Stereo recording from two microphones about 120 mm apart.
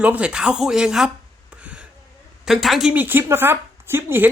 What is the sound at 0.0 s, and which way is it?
A woman's voice, 10° right (ahead or behind).